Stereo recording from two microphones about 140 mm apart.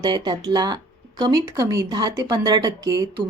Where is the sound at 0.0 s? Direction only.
30° right (ahead or behind).